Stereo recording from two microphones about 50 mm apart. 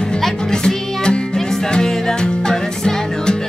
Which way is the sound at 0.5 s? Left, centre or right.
Centre.